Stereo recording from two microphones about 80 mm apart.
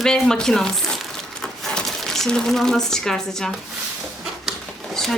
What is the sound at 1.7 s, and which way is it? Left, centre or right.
Speech, centre.